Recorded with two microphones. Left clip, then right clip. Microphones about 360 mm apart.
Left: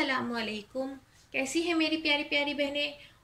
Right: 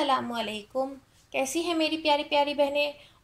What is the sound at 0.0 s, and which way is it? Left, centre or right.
Speech, centre.